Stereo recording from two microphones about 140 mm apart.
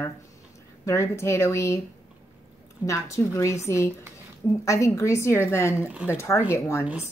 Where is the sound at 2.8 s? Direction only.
20° left (ahead or behind).